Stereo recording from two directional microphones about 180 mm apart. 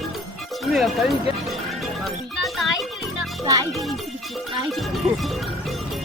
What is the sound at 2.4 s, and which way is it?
Speech, centre (ahead or behind).